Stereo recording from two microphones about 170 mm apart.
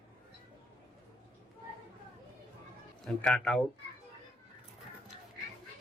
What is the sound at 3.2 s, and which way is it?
Speech, 5° left (ahead or behind).